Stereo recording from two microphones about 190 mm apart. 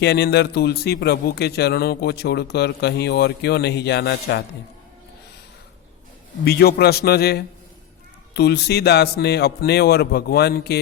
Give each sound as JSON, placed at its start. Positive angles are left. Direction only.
{"t": 0.0, "sound": "a man's voice", "side_deg": 60}
{"t": 6.4, "sound": "a man's voice", "side_deg": 55}